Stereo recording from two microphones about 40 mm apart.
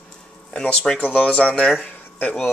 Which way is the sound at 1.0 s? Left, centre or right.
Left.